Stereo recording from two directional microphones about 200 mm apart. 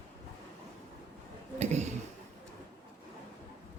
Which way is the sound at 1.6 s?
35° right (ahead or behind).